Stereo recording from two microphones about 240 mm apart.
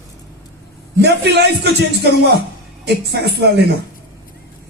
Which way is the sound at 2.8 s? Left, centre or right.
Right.